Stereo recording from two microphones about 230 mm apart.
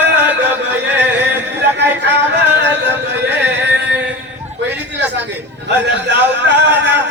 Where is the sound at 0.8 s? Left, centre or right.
Right.